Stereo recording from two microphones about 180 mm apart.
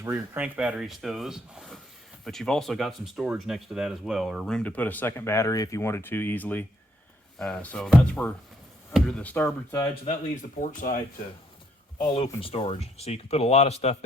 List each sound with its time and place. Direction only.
0.0 s speech: 10° right (ahead or behind); by 9.9 s 15° left (ahead or behind)
9.9 s speech: 40° left (ahead or behind)
12.1 s speech: 30° left (ahead or behind)